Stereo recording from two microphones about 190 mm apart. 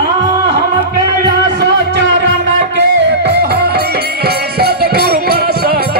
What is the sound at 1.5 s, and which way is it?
Music, 60° right (ahead or behind).